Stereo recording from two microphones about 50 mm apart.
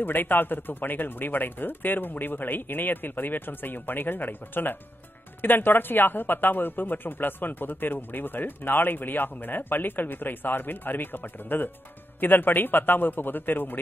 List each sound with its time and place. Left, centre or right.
0.0 s speech: left